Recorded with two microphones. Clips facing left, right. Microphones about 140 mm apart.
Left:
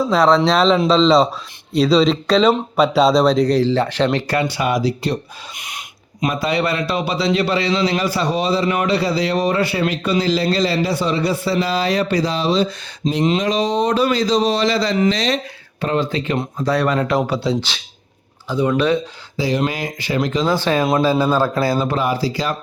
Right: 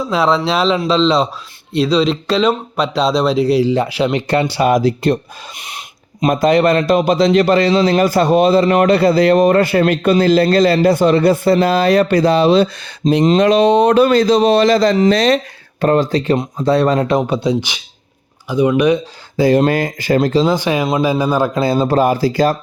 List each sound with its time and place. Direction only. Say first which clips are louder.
0.1 s speech: even; 5° right (ahead or behind)
4.3 s speech: right 5 dB; 30° right (ahead or behind)
4.7 s a man's voice: right 6 dB; 50° right (ahead or behind)
5.5 s a sound: right 1 dB; 30° right (ahead or behind)
6.2 s a man's voice: right 7 dB; 45° right (ahead or behind)
13.0 s a man's voice: right 7 dB; 45° right (ahead or behind)
13.4 s a man's voice: right 8 dB; 60° right (ahead or behind); by 16.4 s 35° right (ahead or behind)
16.4 s a man's voice: right 5 dB; 25° right (ahead or behind)
19.4 s a man's voice: right 8 dB; 55° right (ahead or behind); by 20.5 s 35° right (ahead or behind)
20.5 s a man's voice: right 1 dB; 15° right (ahead or behind)
21.8 s a man's voice: right 6 dB; 45° right (ahead or behind)